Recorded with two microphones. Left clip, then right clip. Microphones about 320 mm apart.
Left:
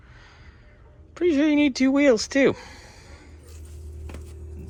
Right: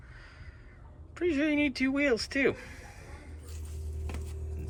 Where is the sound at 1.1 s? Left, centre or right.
Centre.